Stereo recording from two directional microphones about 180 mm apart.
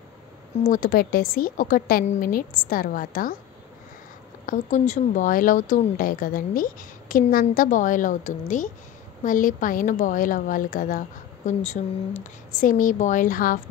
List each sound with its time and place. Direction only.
0.7 s a woman's voice: 50° left (ahead or behind)
4.5 s a woman's voice: 40° left (ahead or behind)